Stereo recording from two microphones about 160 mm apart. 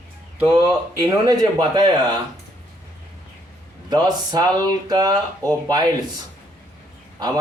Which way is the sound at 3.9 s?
25° right (ahead or behind).